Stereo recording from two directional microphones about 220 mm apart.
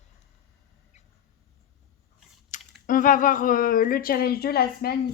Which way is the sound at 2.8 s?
35° left (ahead or behind).